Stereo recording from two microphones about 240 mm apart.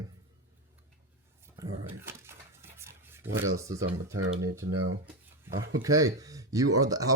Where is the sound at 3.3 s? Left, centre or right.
Right.